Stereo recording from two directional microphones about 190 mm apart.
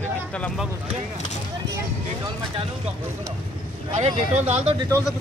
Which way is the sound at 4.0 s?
35° right (ahead or behind).